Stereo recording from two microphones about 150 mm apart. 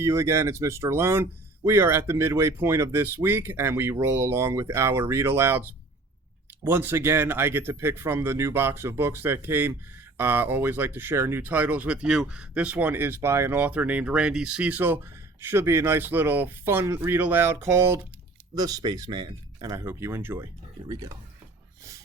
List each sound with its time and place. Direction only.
0.0 s speech: 15° right (ahead or behind)